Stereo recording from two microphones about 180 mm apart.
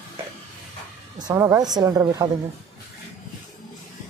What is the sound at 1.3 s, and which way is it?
Speech, 15° right (ahead or behind).